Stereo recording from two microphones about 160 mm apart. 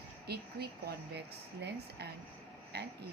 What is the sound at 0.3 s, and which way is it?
Speech, 90° right.